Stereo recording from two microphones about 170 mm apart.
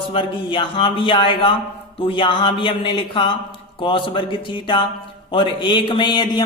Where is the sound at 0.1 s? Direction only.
30° left (ahead or behind).